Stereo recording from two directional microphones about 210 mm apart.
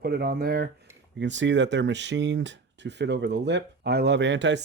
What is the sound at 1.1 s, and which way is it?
Speech, 60° right (ahead or behind).